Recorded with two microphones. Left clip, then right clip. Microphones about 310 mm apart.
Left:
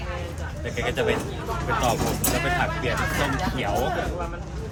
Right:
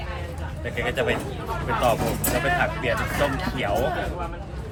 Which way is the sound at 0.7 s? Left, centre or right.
Centre.